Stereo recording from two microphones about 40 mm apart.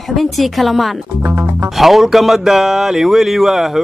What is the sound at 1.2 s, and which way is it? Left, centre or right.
Music, right.